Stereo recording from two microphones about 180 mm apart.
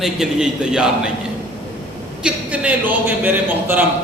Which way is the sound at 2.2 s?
5° right (ahead or behind).